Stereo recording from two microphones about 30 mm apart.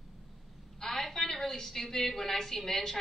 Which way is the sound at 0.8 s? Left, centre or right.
Centre.